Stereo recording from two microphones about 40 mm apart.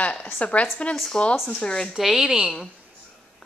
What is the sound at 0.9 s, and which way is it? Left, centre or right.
Speech, centre.